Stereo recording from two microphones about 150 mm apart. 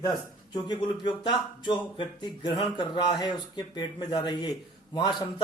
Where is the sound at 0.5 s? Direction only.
30° left (ahead or behind).